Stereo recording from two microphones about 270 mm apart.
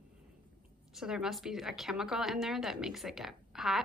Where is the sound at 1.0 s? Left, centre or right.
Centre.